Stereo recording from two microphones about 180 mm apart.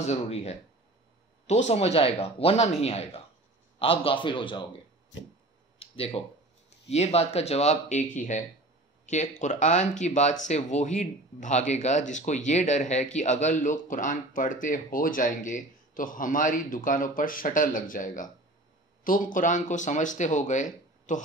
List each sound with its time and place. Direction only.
0.0 s a man's voice: 35° left (ahead or behind)
5.8 s a sound: 30° left (ahead or behind)
6.9 s speech: 35° left (ahead or behind)